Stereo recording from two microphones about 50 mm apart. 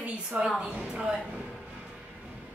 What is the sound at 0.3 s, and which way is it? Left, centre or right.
Speech, right.